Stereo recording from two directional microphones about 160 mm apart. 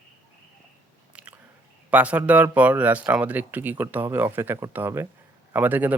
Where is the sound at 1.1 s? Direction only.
10° right (ahead or behind).